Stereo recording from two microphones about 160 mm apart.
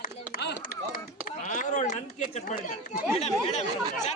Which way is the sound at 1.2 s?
55° left (ahead or behind).